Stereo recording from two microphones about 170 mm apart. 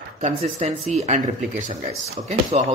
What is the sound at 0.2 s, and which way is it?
Speech, 40° right (ahead or behind).